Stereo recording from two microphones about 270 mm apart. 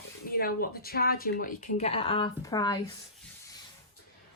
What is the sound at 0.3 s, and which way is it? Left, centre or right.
A woman's voice, left.